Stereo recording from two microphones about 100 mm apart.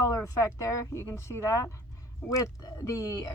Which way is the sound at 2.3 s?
40° left (ahead or behind).